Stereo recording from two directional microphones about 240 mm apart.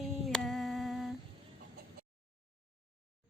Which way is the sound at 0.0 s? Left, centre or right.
Centre.